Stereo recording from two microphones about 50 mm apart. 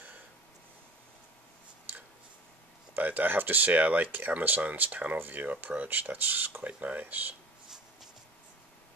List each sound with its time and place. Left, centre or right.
2.9 s speech: right
7.0 s speech: right